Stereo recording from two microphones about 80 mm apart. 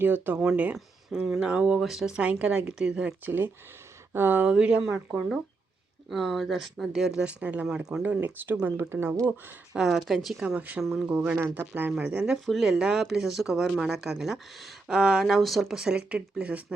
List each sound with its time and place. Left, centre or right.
0.0 s speech: right
0.3 s speech: centre
3.2 s speech: right
4.4 s speech: centre
8.0 s speech: right
9.7 s speech: centre
10.4 s speech: centre
10.8 s speech: centre
11.4 s speech: right
12.5 s speech: centre